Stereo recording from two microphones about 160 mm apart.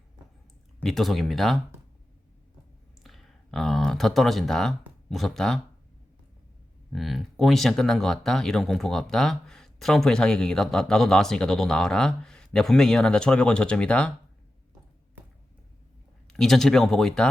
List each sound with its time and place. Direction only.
0.8 s speech: centre (ahead or behind)
3.0 s speech: centre (ahead or behind)
6.9 s speech: centre (ahead or behind)
16.2 s speech: centre (ahead or behind)